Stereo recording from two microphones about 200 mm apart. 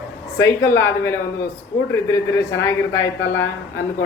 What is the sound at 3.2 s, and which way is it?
Speech, 10° left (ahead or behind).